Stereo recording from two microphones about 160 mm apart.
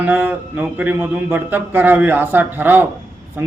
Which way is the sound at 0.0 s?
10° right (ahead or behind).